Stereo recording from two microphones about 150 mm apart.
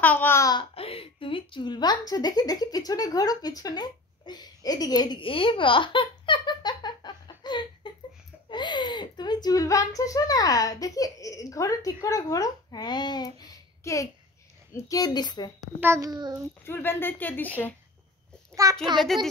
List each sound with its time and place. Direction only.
0.0 s speech: 15° left (ahead or behind)
0.7 s a woman's voice: 40° left (ahead or behind)
15.6 s a child's voice: 20° right (ahead or behind)
16.6 s speech: 15° left (ahead or behind)
18.5 s a child's voice: 20° right (ahead or behind)
18.9 s speech: centre (ahead or behind)